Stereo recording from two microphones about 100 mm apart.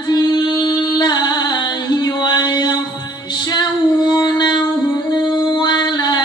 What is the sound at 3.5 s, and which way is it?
Female singing, 45° left (ahead or behind).